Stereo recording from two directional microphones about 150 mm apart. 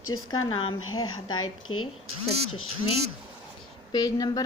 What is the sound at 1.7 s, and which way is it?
Speech, 35° left (ahead or behind).